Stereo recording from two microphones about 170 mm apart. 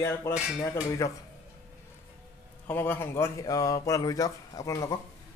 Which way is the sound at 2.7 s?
10° left (ahead or behind).